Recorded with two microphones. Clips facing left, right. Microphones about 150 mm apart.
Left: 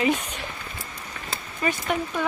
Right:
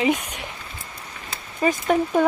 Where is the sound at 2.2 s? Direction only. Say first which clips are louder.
Right 8 dB; 50° right (ahead or behind).